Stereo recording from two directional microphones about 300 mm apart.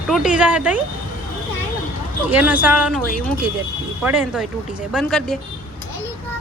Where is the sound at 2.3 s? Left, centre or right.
Centre.